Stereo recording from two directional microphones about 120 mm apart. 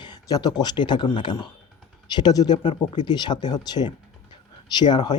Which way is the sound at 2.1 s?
35° left (ahead or behind).